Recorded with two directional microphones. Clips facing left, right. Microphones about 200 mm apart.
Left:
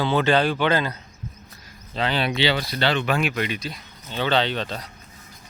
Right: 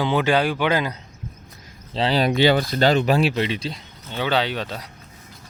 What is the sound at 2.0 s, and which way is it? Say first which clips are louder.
Speech: right 4 dB; 35° right (ahead or behind).